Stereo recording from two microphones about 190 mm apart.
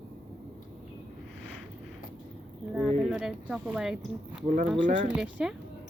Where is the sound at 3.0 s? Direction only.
5° right (ahead or behind).